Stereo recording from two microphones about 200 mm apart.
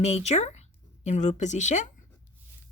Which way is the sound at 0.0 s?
30° left (ahead or behind).